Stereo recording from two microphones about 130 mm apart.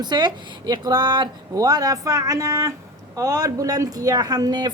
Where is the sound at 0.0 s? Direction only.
35° right (ahead or behind).